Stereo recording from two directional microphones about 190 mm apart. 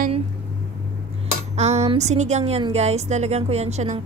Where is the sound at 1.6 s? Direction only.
35° right (ahead or behind).